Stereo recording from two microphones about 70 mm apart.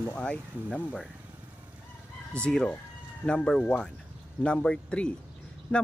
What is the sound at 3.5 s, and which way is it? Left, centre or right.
A man's voice, left.